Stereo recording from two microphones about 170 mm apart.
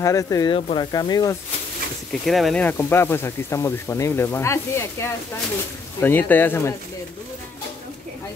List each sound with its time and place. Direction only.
0.0 s speech: 20° left (ahead or behind)
0.6 s speech: 35° left (ahead or behind)
0.9 s speech: 20° left (ahead or behind)
2.2 s speech: centre (ahead or behind)